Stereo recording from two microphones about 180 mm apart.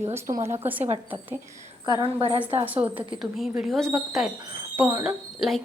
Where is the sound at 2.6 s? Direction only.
10° right (ahead or behind).